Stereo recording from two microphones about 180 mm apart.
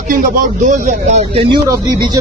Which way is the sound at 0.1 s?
50° right (ahead or behind).